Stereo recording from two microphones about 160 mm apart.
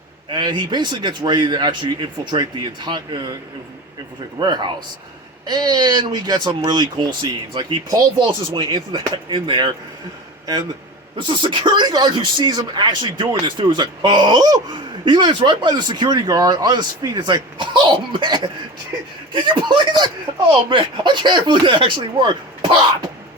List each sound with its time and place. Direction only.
0.3 s speech: 30° right (ahead or behind)
4.4 s a man's voice: 30° right (ahead or behind)